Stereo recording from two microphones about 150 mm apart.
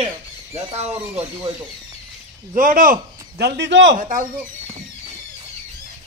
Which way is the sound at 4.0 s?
60° right (ahead or behind).